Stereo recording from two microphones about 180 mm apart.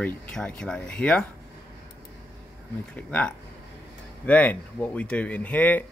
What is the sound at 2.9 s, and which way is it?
Speech, 5° left (ahead or behind).